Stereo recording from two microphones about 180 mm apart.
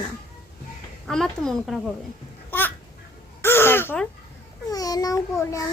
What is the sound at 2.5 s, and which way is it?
Babbling, 10° left (ahead or behind).